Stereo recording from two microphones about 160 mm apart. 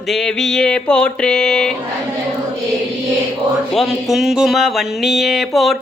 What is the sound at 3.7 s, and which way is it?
Speech, centre (ahead or behind).